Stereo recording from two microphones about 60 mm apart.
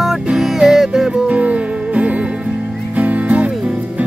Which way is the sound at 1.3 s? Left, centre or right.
Right.